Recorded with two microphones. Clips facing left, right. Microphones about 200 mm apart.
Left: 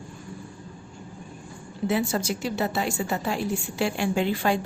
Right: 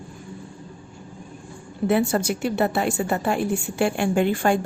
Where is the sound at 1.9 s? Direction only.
55° right (ahead or behind).